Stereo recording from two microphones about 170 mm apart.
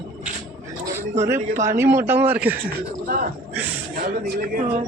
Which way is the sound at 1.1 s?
15° right (ahead or behind).